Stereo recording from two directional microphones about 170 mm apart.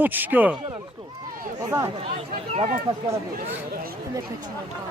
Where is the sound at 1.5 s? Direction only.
20° right (ahead or behind).